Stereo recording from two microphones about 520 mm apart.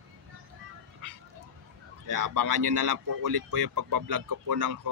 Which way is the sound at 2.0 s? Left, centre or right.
Right.